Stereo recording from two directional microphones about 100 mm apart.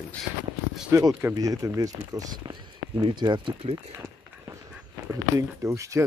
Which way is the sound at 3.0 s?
50° right (ahead or behind).